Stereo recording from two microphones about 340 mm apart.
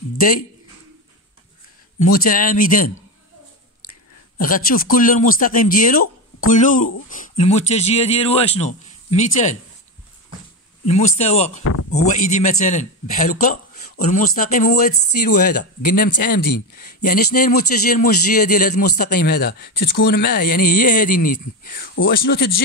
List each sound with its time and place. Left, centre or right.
2.0 s speech: left
4.4 s speech: left
10.9 s speech: centre
11.6 s speech: left
12.1 s speech: left